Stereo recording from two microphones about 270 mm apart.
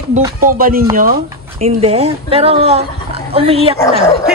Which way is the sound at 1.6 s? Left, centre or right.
Right.